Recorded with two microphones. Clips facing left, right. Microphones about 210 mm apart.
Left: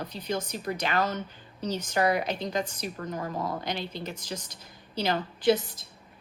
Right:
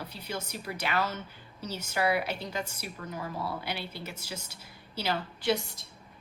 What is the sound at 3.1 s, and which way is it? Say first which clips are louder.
Speech: left 2 dB; 50° left (ahead or behind).